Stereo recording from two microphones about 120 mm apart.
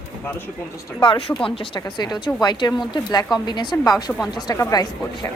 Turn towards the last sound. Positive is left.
turn(degrees=35)  # may be behind; listen again after turning